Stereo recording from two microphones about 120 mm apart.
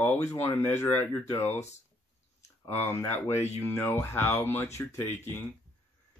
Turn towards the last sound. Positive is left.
turn(degrees=20)  # may be behind; listen again after turning